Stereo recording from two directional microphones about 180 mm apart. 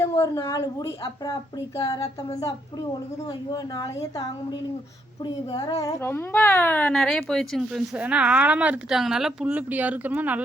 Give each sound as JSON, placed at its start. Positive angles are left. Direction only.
{"t": 0.0, "sound": "speech", "side_deg": 15}
{"t": 3.2, "sound": "a woman's voice", "side_deg": 20}